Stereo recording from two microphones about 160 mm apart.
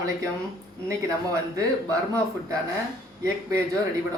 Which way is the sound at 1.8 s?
20° right (ahead or behind).